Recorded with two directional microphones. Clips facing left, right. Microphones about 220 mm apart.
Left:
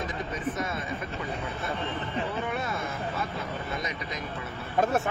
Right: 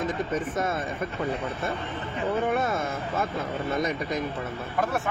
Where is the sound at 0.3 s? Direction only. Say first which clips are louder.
Right 4 dB; 50° right (ahead or behind).